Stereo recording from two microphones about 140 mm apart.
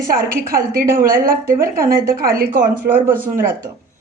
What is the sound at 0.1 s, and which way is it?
A woman's voice, 90° right.